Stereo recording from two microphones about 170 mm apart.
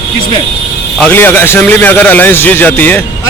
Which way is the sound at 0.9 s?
10° left (ahead or behind).